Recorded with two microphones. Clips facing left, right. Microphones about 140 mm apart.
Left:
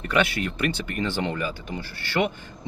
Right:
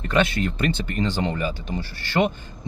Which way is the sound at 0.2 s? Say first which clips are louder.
Right 2 dB; 25° right (ahead or behind).